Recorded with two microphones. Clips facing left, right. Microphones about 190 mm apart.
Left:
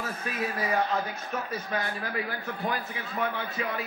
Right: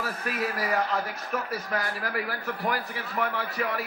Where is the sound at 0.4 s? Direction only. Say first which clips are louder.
Even; 25° left (ahead or behind).